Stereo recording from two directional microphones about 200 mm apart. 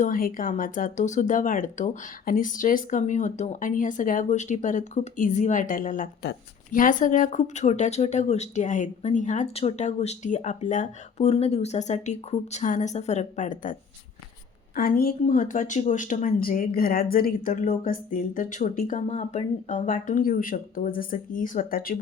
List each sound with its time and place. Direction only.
0.0 s speech: 45° left (ahead or behind)
14.8 s speech: 45° left (ahead or behind)